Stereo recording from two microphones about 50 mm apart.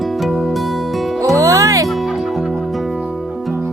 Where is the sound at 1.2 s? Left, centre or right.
Right.